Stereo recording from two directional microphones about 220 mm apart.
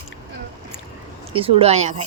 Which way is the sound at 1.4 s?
25° right (ahead or behind).